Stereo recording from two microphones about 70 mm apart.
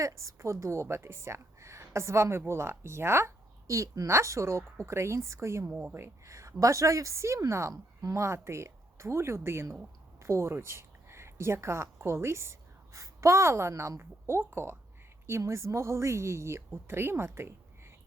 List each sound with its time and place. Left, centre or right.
0.0 s a woman's voice: right
6.2 s a woman's voice: right